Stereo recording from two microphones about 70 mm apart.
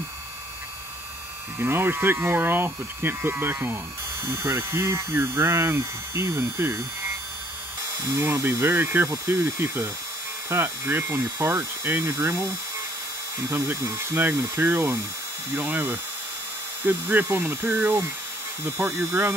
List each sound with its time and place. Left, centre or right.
1.6 s speech: right
8.2 s speech: right
14.1 s speech: right
19.0 s speech: right